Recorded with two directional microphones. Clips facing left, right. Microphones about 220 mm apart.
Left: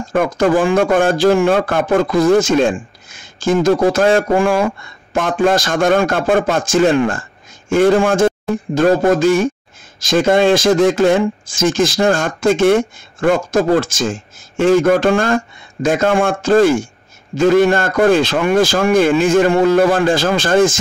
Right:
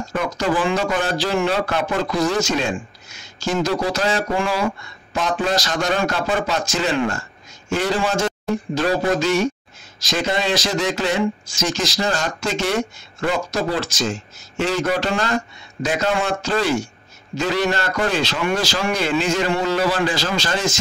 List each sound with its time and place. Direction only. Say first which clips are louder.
0.1 s speech: left 8 dB; 50° left (ahead or behind)